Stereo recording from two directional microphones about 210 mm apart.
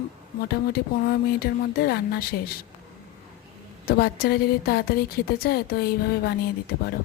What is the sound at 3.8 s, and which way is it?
Speech, 45° left (ahead or behind).